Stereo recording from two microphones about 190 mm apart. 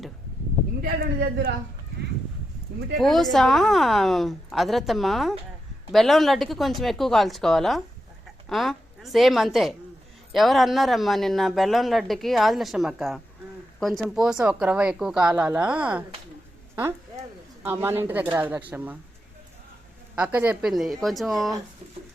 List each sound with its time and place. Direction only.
0.8 s a man's voice: 50° right (ahead or behind)
3.0 s a woman's voice: centre (ahead or behind)
17.6 s speech: 10° right (ahead or behind)
20.1 s speech: 5° right (ahead or behind)